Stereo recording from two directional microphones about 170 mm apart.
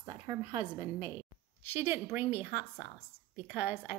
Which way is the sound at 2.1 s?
10° right (ahead or behind).